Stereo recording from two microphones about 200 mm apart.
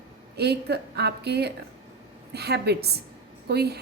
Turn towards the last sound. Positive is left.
turn(degrees=-55)  # may be behind; listen again after turning